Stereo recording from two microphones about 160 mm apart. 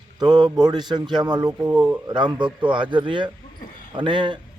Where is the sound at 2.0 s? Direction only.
25° right (ahead or behind).